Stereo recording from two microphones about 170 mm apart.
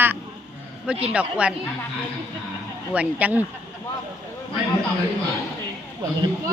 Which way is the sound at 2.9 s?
10° right (ahead or behind).